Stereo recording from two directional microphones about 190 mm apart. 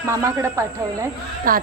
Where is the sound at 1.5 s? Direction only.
45° right (ahead or behind).